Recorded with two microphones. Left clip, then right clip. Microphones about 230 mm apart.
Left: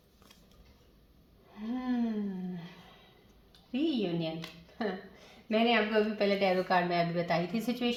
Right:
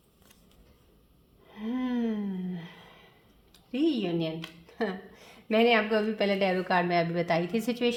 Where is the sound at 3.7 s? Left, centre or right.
Right.